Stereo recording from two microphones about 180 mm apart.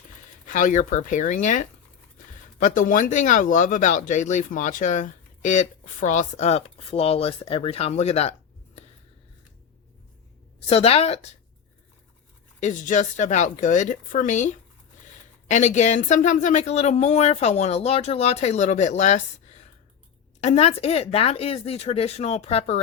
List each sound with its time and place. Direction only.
0.4 s speech: 45° left (ahead or behind)
10.7 s speech: 35° left (ahead or behind)
12.5 s speech: 40° left (ahead or behind)